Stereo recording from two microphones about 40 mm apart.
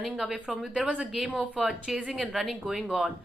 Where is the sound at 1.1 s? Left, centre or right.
Centre.